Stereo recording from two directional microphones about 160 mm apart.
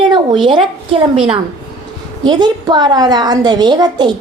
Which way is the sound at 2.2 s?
25° right (ahead or behind).